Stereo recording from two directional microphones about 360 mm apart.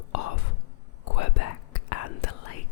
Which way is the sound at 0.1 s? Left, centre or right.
Left.